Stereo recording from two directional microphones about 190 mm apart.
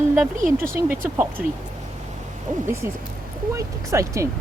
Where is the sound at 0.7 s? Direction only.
15° right (ahead or behind).